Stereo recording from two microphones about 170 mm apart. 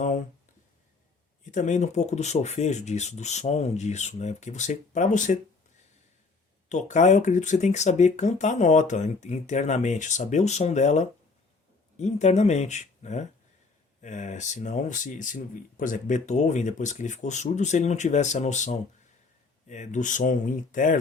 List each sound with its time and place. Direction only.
1.5 s speech: 45° left (ahead or behind)
6.7 s speech: 45° left (ahead or behind)